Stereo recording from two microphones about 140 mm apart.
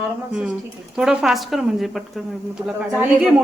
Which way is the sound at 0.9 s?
5° right (ahead or behind).